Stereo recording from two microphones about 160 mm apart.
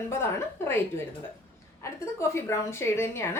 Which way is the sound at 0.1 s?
15° left (ahead or behind).